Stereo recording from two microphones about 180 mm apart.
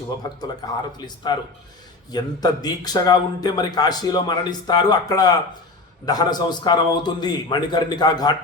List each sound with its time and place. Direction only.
0.6 s a man's voice: 20° left (ahead or behind)